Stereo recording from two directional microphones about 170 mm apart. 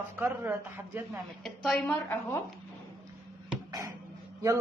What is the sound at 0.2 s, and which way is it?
Speech, 15° right (ahead or behind).